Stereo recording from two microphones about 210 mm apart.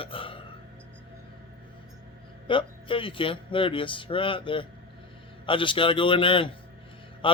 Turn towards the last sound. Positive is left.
turn(degrees=25)  # may be behind; listen again after turning